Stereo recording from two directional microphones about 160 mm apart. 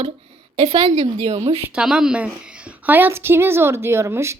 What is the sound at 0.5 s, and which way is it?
Speech, 35° right (ahead or behind).